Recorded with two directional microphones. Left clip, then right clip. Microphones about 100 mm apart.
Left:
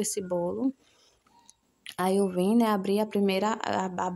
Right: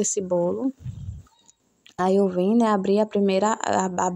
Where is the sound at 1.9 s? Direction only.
25° right (ahead or behind).